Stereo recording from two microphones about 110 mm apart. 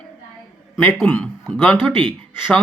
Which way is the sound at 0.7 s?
15° left (ahead or behind).